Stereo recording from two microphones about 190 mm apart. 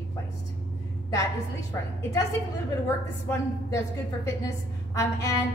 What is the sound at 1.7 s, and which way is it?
A woman's voice, 15° left (ahead or behind).